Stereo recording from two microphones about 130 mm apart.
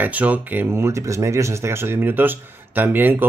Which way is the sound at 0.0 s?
10° right (ahead or behind).